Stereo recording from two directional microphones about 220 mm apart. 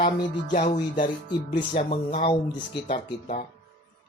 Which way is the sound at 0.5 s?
35° left (ahead or behind).